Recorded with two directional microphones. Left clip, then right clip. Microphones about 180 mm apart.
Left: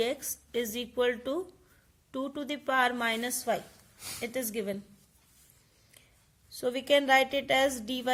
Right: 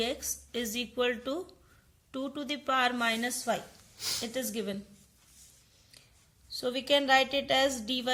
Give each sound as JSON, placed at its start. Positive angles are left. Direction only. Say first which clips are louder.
{"t": 0.0, "sound": "a woman's voice", "louder": "left 2 dB", "side_deg": 35}
{"t": 6.5, "sound": "a woman's voice", "louder": "left 2 dB", "side_deg": 40}